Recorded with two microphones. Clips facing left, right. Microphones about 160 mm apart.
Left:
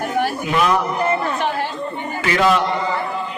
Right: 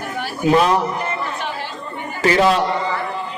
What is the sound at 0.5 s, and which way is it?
Speech, 35° right (ahead or behind).